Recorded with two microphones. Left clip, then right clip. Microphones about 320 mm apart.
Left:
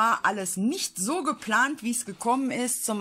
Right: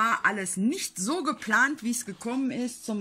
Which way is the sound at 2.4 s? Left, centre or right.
Centre.